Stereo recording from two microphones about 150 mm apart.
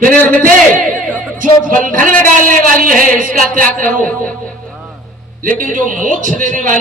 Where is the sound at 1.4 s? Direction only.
60° right (ahead or behind).